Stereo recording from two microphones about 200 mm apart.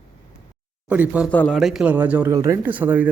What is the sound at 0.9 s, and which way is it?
Speech, 5° right (ahead or behind).